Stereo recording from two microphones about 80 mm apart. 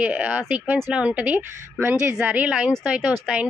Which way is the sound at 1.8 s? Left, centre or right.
Right.